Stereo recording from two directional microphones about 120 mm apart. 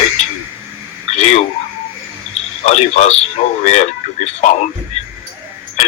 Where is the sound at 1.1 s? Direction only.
70° left (ahead or behind).